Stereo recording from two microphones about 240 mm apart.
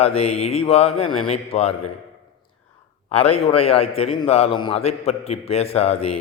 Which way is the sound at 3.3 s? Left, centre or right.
Left.